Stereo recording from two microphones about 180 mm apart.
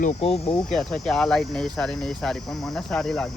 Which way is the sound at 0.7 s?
Centre (ahead or behind).